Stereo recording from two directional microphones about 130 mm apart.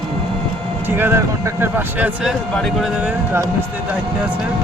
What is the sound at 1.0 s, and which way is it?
Speech, 20° right (ahead or behind).